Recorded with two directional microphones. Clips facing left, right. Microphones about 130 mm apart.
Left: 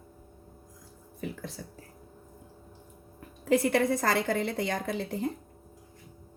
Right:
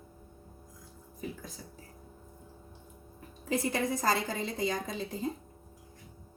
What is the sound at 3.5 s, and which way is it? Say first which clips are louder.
A woman's voice: left 6 dB; 60° left (ahead or behind).